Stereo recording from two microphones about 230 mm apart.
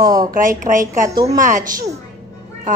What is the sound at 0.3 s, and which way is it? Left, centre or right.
A woman's voice, right.